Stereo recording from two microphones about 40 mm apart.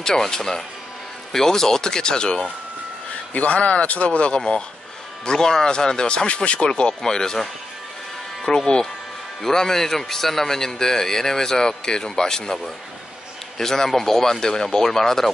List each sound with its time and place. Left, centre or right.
0.0 s a man's voice: centre
3.3 s speech: left
5.2 s a man's voice: centre
8.5 s a man's voice: centre